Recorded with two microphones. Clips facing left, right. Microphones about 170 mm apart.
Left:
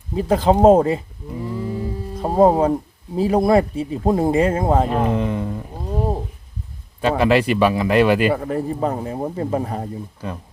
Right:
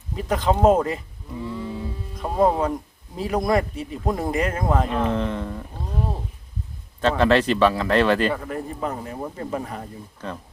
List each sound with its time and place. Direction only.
0.2 s speech: 30° left (ahead or behind)
1.5 s music: 40° left (ahead or behind)
3.2 s speech: 30° left (ahead or behind)
5.0 s speech: 10° left (ahead or behind)
7.2 s speech: 10° left (ahead or behind)
8.3 s speech: 35° left (ahead or behind)
9.3 s speech: 30° left (ahead or behind)
10.2 s speech: 10° left (ahead or behind)